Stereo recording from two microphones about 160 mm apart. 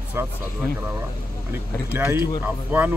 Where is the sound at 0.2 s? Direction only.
15° right (ahead or behind).